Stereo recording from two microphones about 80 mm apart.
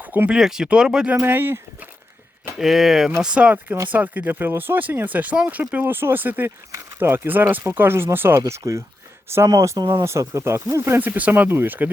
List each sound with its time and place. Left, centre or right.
0.0 s a sound: right
0.3 s speech: centre
1.2 s speech: right
2.6 s speech: centre
3.2 s speech: centre
8.4 s speech: right
9.7 s speech: right
10.0 s speech: right
11.0 s speech: right